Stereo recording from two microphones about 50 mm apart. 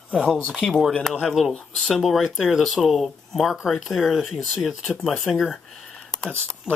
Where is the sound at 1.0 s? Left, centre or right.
Centre.